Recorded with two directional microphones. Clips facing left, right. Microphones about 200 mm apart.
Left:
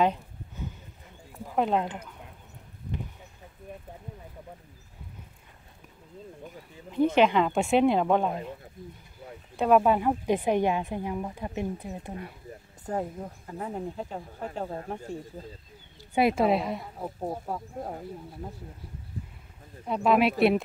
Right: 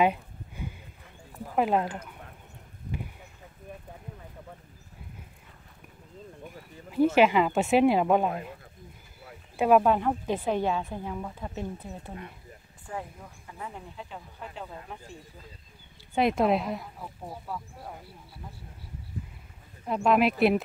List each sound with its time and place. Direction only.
0.0 s a sound: 10° right (ahead or behind)
1.5 s speech: 5° right (ahead or behind)
6.4 s speech: 5° right (ahead or behind)
9.6 s speech: centre (ahead or behind); by 12.2 s 15° left (ahead or behind)
12.8 s speech: 40° left (ahead or behind)
16.2 s speech: 5° left (ahead or behind)
17.0 s speech: 40° left (ahead or behind)
19.9 s speech: centre (ahead or behind)